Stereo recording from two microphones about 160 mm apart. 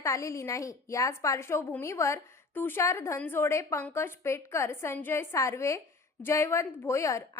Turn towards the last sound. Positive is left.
turn(degrees=20)  # may be behind; listen again after turning